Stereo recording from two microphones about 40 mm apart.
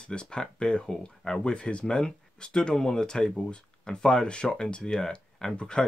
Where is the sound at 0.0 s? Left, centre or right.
Left.